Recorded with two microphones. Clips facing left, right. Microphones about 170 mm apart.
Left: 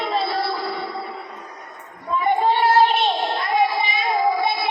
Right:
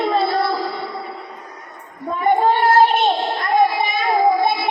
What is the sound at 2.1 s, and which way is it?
Child singing, 50° right (ahead or behind).